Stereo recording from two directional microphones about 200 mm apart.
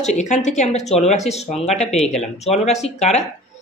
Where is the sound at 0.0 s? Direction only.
35° left (ahead or behind).